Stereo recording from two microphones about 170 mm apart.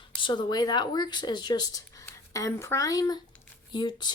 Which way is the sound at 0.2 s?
25° left (ahead or behind).